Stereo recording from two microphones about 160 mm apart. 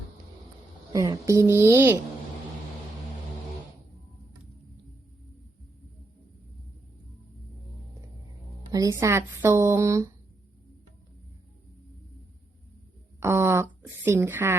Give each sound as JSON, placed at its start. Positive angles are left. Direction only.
{"t": 0.9, "sound": "speech", "side_deg": -20}
{"t": 8.7, "sound": "speech", "side_deg": -20}
{"t": 13.1, "sound": "speech", "side_deg": -15}